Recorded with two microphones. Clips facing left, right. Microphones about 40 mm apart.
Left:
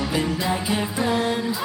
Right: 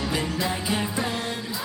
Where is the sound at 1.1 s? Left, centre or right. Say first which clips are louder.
Left 7 dB; centre.